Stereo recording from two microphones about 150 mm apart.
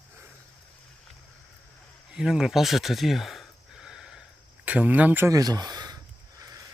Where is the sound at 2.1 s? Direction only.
5° right (ahead or behind).